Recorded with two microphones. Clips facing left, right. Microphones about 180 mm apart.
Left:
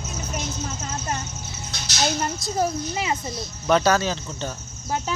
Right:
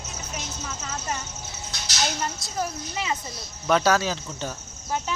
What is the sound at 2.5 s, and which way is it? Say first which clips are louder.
Speech: left 6 dB; 35° left (ahead or behind).